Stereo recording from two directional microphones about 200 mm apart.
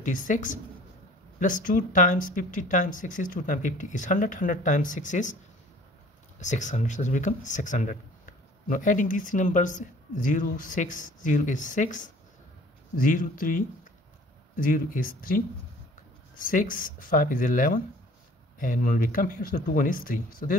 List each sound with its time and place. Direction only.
0.0 s speech: 40° left (ahead or behind)
6.4 s speech: 35° left (ahead or behind)